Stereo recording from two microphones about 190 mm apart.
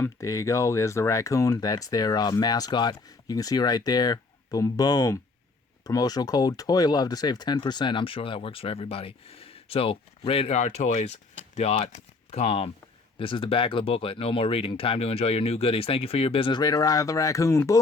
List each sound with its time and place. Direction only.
0.0 s speech: 15° left (ahead or behind)